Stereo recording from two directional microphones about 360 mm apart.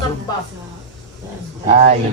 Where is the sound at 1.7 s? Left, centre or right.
Centre.